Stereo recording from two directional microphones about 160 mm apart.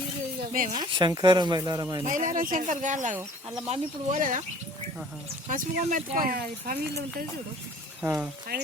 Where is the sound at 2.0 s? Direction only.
55° right (ahead or behind).